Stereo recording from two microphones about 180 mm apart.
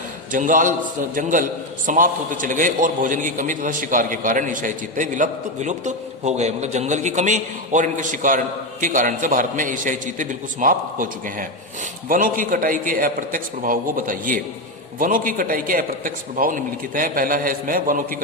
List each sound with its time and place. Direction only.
0.3 s a man's voice: 45° right (ahead or behind)